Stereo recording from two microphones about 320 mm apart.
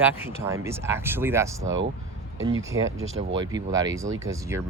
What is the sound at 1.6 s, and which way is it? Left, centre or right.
Speech, right.